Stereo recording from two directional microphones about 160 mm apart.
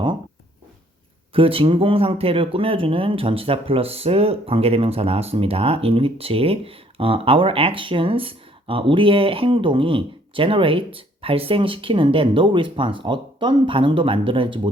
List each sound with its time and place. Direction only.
1.3 s speech: 35° right (ahead or behind)